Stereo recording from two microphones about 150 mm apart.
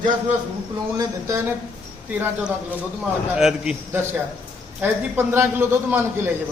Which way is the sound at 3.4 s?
5° right (ahead or behind).